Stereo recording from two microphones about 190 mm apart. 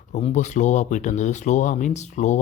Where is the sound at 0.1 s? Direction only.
40° left (ahead or behind).